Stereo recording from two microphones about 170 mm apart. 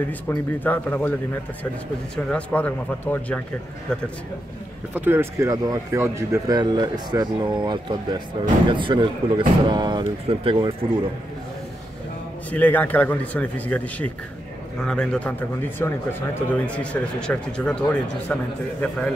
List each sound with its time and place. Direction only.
0.3 s speech: 10° left (ahead or behind)
4.9 s speech: 10° right (ahead or behind); by 10.9 s 30° right (ahead or behind)
12.4 s a man's voice: 10° left (ahead or behind)